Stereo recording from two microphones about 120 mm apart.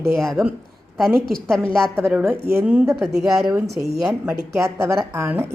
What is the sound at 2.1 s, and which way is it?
A woman's voice, 15° right (ahead or behind).